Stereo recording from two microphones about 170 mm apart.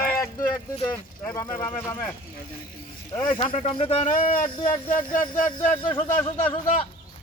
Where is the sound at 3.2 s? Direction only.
30° left (ahead or behind).